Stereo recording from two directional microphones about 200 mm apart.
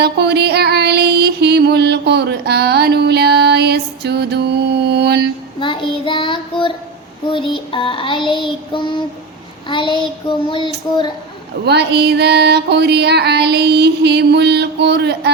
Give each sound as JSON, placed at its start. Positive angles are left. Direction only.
{"t": 0.0, "sound": "music", "side_deg": -55}
{"t": 5.5, "sound": "child singing", "side_deg": 25}
{"t": 11.6, "sound": "a sound", "side_deg": -55}